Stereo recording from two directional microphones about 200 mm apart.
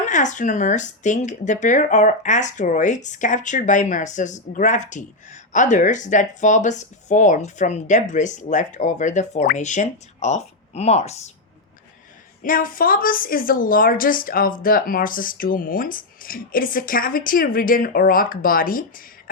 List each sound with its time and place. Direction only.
0.0 s speech: 40° left (ahead or behind)
12.4 s speech: 45° left (ahead or behind)